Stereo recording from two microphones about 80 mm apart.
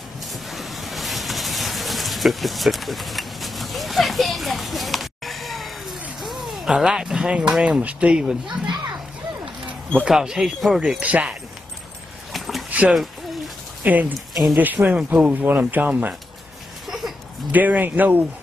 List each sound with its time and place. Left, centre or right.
0.3 s waves: centre
7.3 s speech: centre
10.0 s speech: centre
10.8 s speech: centre
12.3 s a sound: centre
13.8 s speech: right
14.3 s speech: centre
14.8 s speech: centre
17.5 s speech: right